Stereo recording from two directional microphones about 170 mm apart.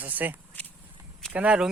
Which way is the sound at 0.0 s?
10° right (ahead or behind).